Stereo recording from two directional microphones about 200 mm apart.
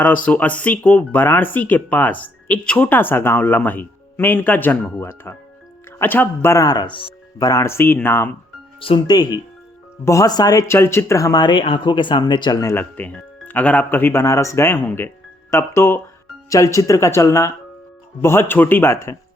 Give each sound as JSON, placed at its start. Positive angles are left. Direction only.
{"t": 0.0, "sound": "speech", "side_deg": 5}
{"t": 8.8, "sound": "speech", "side_deg": 25}